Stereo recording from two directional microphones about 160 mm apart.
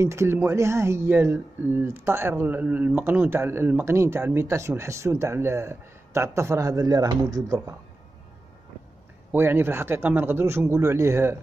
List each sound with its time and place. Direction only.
0.0 s speech: 15° right (ahead or behind)
9.3 s speech: 15° right (ahead or behind)